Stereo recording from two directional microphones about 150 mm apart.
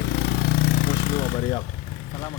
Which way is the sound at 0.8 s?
55° left (ahead or behind).